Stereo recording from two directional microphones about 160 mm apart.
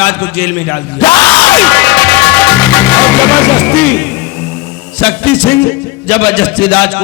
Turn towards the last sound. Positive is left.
turn(degrees=5)  # may be behind; listen again after turning